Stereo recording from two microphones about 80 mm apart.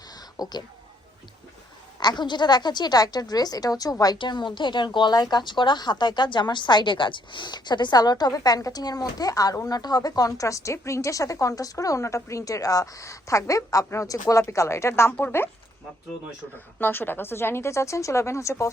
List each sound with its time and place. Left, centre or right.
0.4 s a woman's voice: left
2.0 s a woman's voice: left
4.2 s speech: left
16.8 s speech: left